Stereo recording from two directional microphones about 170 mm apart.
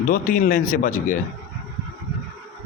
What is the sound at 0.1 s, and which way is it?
A man's voice, 50° left (ahead or behind).